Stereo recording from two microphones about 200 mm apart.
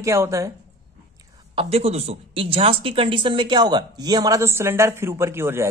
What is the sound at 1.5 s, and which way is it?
Speech, 30° right (ahead or behind).